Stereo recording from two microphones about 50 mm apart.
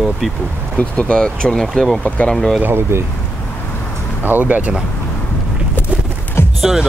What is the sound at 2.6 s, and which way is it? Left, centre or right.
Speech, right.